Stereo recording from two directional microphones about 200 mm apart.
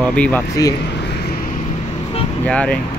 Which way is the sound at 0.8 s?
55° left (ahead or behind).